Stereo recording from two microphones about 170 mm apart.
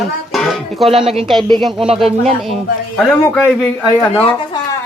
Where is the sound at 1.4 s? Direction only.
25° right (ahead or behind).